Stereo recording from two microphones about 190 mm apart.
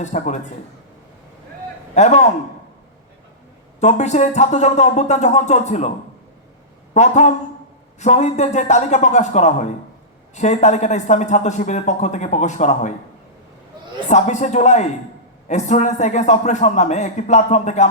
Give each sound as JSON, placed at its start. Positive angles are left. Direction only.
{"t": 0.0, "sound": "speech", "side_deg": 40}
{"t": 2.0, "sound": "speech", "side_deg": 40}
{"t": 3.8, "sound": "speech", "side_deg": 40}
{"t": 6.9, "sound": "speech", "side_deg": 40}
{"t": 14.1, "sound": "speech", "side_deg": 40}